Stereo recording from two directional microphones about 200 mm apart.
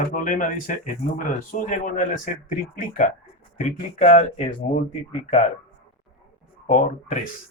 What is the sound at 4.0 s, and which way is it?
Speech, 35° left (ahead or behind).